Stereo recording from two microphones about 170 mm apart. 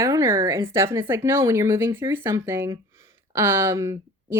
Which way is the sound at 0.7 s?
15° right (ahead or behind).